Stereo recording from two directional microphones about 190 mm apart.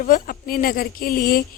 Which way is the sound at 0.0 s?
45° left (ahead or behind).